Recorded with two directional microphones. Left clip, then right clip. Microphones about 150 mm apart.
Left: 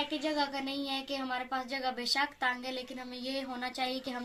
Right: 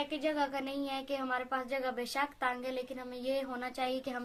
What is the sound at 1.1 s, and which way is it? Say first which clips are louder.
A woman's voice: right 2 dB; 40° right (ahead or behind).